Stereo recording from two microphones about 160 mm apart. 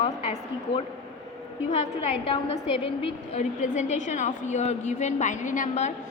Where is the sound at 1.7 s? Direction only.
40° left (ahead or behind).